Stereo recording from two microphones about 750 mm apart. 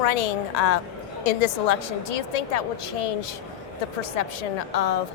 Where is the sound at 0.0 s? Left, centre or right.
Left.